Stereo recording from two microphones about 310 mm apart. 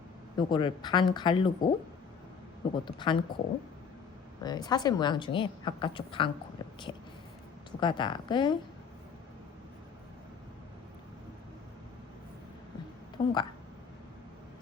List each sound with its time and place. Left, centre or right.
0.3 s a woman's voice: centre
2.7 s a woman's voice: centre
4.4 s a woman's voice: centre
7.8 s a woman's voice: centre
13.2 s a sound: centre